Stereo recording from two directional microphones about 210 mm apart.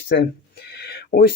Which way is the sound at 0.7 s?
50° left (ahead or behind).